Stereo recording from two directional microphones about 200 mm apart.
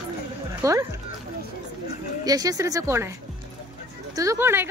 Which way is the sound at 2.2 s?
20° right (ahead or behind).